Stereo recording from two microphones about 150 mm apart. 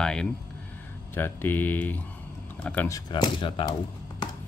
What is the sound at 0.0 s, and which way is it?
Speech, 5° left (ahead or behind).